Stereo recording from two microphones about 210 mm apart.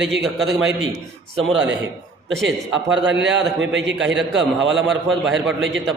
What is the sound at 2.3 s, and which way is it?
Speech, centre (ahead or behind).